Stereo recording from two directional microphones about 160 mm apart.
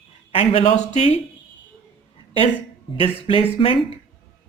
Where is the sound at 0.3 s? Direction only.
40° left (ahead or behind).